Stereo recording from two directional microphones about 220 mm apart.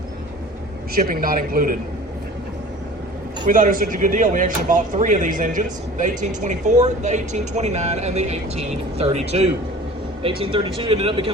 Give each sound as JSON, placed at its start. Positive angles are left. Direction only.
{"t": 0.9, "sound": "speech", "side_deg": -40}
{"t": 3.4, "sound": "speech", "side_deg": -35}